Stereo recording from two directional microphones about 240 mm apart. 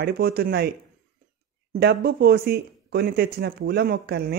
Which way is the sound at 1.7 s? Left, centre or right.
Right.